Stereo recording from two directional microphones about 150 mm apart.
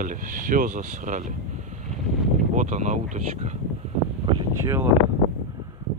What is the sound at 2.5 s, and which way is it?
Speech, 50° right (ahead or behind).